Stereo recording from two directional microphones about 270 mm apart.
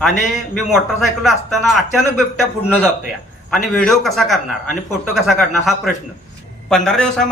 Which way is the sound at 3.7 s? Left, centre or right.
Centre.